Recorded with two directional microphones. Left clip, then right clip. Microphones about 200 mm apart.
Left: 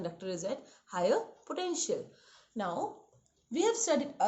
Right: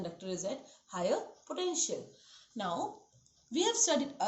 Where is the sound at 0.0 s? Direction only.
55° left (ahead or behind).